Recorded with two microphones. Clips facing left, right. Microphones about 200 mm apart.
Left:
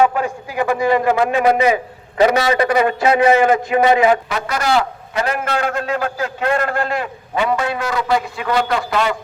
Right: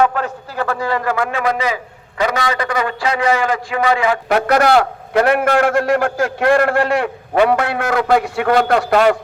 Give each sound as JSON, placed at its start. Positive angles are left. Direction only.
{"t": 0.0, "sound": "a man's voice", "side_deg": 10}
{"t": 4.3, "sound": "a man's voice", "side_deg": -60}